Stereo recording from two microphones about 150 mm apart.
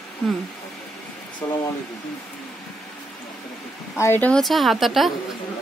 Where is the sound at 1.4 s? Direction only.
25° left (ahead or behind).